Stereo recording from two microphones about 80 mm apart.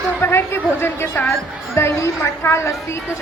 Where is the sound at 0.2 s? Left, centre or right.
Left.